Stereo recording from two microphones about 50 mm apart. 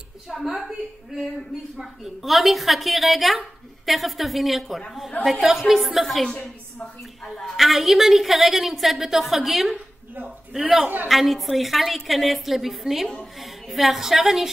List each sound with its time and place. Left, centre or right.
0.4 s a woman's voice: centre
1.8 s a woman's voice: centre
6.2 s a woman's voice: centre
7.3 s a woman's voice: centre
11.1 s a woman's voice: centre